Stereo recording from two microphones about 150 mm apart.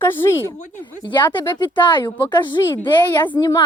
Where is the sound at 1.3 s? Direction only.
30° left (ahead or behind).